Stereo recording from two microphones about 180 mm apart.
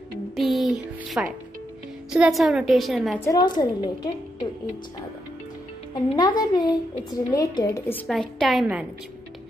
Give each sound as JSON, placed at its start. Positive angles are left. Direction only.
{"t": 0.4, "sound": "music", "side_deg": 0}
{"t": 2.1, "sound": "a woman's voice", "side_deg": -5}
{"t": 3.3, "sound": "speech", "side_deg": 20}
{"t": 6.1, "sound": "speech", "side_deg": 25}
{"t": 7.9, "sound": "a woman's voice", "side_deg": 5}